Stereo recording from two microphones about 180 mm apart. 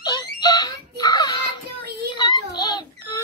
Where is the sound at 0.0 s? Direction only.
25° left (ahead or behind).